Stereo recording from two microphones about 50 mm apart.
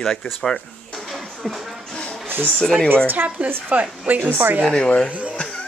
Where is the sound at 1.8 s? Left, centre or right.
Centre.